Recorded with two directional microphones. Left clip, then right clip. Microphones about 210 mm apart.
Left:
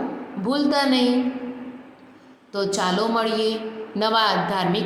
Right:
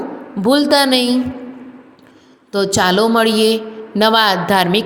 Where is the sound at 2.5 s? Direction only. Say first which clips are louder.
Right 8 dB; 35° right (ahead or behind).